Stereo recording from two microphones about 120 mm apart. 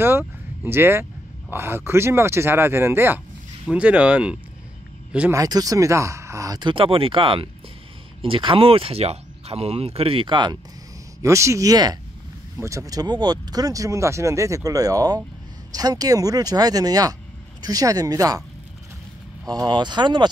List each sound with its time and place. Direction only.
0.0 s speech: 20° right (ahead or behind)
5.3 s speech: 30° right (ahead or behind)
6.6 s speech: 45° right (ahead or behind)
11.2 s speech: 25° right (ahead or behind)
19.5 s speech: 35° right (ahead or behind)